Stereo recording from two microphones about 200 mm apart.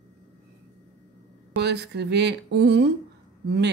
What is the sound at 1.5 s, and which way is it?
A woman's voice, 55° right (ahead or behind).